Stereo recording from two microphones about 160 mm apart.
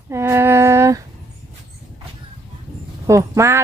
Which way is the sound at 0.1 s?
15° right (ahead or behind).